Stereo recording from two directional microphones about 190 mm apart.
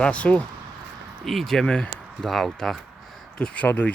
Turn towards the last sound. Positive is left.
turn(degrees=5)  # may be behind; listen again after turning